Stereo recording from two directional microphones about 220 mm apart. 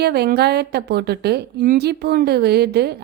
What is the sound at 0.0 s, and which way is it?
A woman's voice, 45° right (ahead or behind).